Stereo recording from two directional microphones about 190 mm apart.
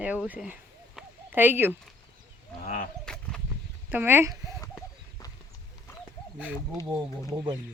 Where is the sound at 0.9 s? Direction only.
10° right (ahead or behind).